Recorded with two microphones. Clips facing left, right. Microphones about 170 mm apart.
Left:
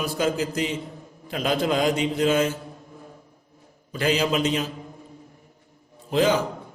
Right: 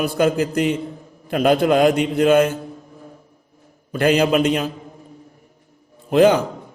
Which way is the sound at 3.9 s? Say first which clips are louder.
Right 7 dB; 55° right (ahead or behind).